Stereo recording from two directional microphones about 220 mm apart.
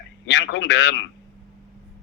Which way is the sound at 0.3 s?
55° left (ahead or behind).